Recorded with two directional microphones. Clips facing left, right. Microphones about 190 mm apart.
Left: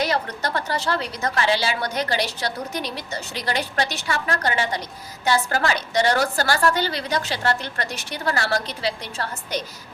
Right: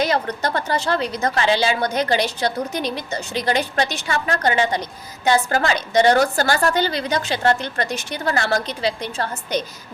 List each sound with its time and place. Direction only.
0.0 s a woman's voice: 20° right (ahead or behind)